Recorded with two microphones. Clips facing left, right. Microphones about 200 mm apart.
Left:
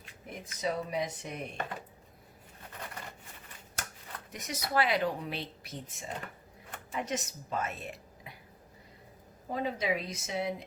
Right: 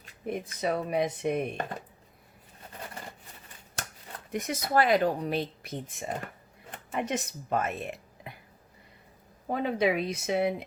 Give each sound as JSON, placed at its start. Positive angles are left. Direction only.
{"t": 0.3, "sound": "speech", "side_deg": -60}
{"t": 4.3, "sound": "speech", "side_deg": -55}
{"t": 9.5, "sound": "speech", "side_deg": -65}